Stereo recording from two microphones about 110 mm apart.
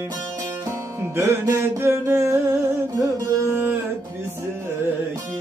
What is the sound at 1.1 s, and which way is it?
Music, 25° right (ahead or behind).